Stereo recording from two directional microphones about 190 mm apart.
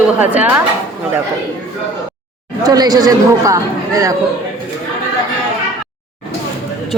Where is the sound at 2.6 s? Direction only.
20° right (ahead or behind).